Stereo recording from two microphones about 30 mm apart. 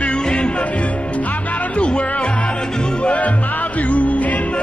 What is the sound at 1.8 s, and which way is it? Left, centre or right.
Music, left.